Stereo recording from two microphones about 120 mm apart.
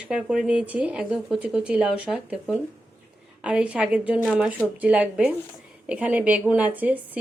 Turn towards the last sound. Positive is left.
turn(degrees=-10)  # may be behind; listen again after turning